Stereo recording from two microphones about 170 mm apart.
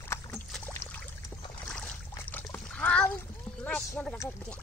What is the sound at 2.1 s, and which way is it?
Trickle, 10° left (ahead or behind).